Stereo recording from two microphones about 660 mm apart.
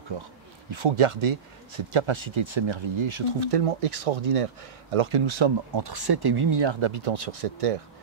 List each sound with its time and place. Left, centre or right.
0.1 s speech: right
6.9 s speech: right